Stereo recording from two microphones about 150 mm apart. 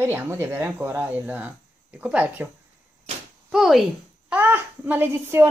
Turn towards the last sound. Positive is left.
turn(degrees=-15)  # may be behind; listen again after turning